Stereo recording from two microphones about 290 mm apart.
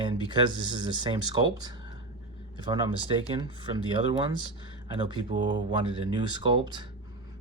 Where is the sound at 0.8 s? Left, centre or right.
Centre.